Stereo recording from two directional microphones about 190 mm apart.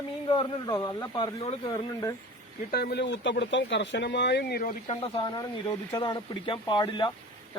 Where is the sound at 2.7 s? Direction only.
55° left (ahead or behind).